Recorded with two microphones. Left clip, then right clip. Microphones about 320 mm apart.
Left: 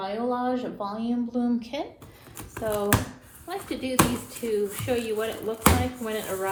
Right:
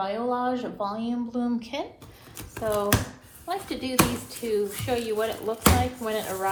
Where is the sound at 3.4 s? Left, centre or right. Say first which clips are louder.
Right 1 dB; centre.